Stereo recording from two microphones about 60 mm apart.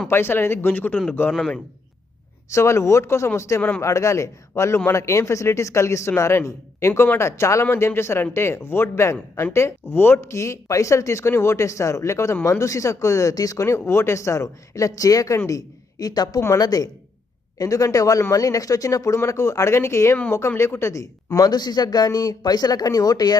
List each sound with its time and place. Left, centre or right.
0.1 s speech: left
2.5 s a man's voice: left
13.7 s speech: left
17.6 s speech: left